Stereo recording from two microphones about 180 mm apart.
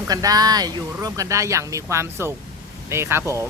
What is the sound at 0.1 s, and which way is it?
Speech, 20° right (ahead or behind).